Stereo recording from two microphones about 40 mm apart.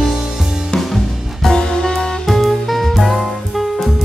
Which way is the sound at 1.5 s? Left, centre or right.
Centre.